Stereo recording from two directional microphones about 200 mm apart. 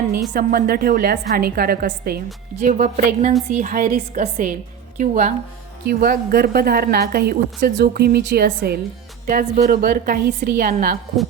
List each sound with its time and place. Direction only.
0.3 s a woman's voice: 45° right (ahead or behind)
5.8 s speech: 50° right (ahead or behind)